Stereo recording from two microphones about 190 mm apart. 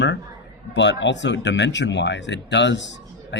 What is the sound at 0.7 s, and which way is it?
Speech, 70° left (ahead or behind).